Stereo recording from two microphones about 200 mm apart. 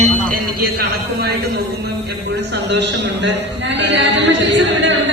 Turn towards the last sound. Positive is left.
turn(degrees=-65)  # may be behind; listen again after turning